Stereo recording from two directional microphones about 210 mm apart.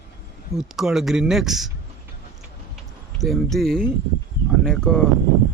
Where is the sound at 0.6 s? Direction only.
Centre (ahead or behind).